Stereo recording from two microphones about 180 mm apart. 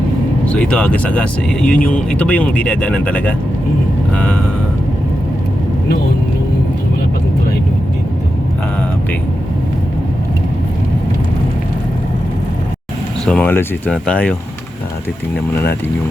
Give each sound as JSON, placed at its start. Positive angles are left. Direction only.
{"t": 0.4, "sound": "speech", "side_deg": 5}
{"t": 13.2, "sound": "speech", "side_deg": 5}